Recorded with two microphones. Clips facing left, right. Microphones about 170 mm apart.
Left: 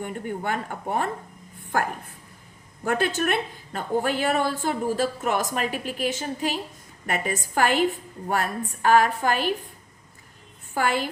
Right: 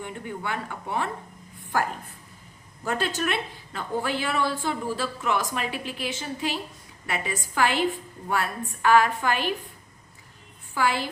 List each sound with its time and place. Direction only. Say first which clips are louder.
0.0 s a woman's voice: left 4 dB; 45° left (ahead or behind)
2.8 s a woman's voice: left 3 dB; 55° left (ahead or behind)
10.8 s a woman's voice: left 1 dB; 50° left (ahead or behind)